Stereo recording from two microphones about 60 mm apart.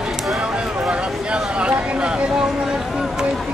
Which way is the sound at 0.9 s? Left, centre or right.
Centre.